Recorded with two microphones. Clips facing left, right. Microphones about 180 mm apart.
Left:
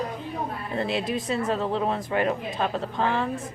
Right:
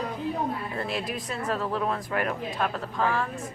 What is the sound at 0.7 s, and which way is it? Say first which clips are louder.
Speech: left 4 dB; 25° left (ahead or behind).